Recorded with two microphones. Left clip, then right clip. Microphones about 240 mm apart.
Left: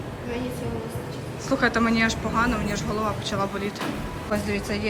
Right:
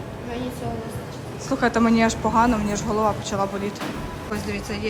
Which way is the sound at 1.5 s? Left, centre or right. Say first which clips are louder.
Right 2 dB; centre.